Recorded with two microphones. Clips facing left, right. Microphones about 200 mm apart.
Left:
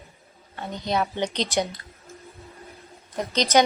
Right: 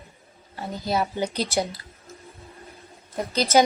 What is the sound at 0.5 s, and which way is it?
Speech, centre (ahead or behind).